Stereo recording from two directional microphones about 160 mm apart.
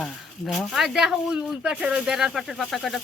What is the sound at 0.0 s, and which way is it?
Speech, centre (ahead or behind).